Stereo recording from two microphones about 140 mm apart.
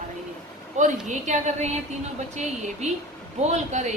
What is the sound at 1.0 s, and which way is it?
A woman's voice, 55° right (ahead or behind).